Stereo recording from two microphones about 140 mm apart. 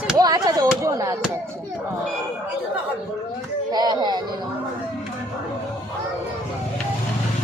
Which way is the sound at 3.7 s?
30° right (ahead or behind).